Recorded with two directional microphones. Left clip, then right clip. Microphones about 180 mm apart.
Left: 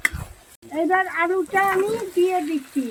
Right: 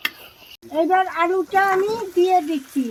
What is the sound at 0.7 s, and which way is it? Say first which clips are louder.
Speech: right 2 dB; 55° right (ahead or behind).